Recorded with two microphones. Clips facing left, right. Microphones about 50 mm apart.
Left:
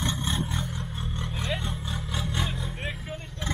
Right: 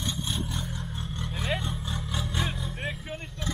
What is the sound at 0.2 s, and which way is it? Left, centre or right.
Vehicle, left.